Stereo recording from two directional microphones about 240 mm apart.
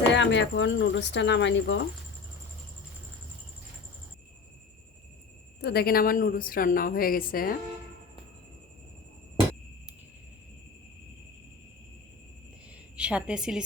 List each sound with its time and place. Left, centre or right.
0.1 s speech: left
5.6 s a woman's voice: left
13.0 s a woman's voice: centre